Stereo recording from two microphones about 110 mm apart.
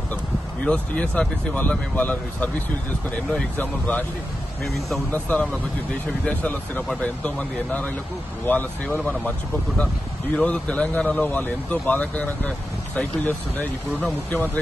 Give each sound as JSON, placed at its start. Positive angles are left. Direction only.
{"t": 0.7, "sound": "speech", "side_deg": 10}
{"t": 4.6, "sound": "speech", "side_deg": 0}
{"t": 5.1, "sound": "speech", "side_deg": 15}
{"t": 10.3, "sound": "speech", "side_deg": 10}